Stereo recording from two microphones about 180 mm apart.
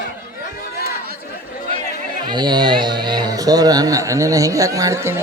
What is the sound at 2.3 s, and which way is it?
Speech, 25° right (ahead or behind).